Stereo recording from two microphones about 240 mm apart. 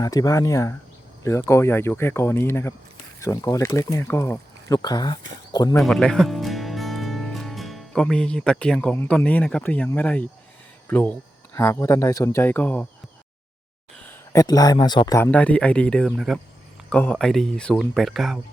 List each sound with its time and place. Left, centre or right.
0.0 s speech: centre
5.5 s a sound: centre
5.7 s speech: centre
13.9 s speech: centre